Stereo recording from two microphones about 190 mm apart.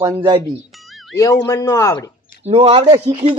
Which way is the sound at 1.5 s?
15° left (ahead or behind).